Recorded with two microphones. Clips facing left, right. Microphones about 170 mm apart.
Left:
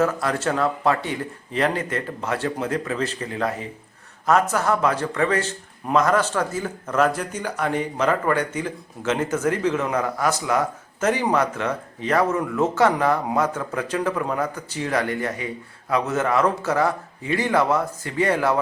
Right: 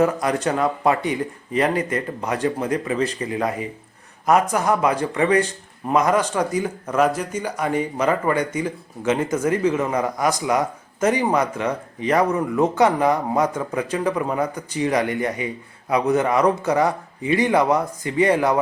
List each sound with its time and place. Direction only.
0.0 s a man's voice: 15° right (ahead or behind)
15.9 s a man's voice: 15° right (ahead or behind)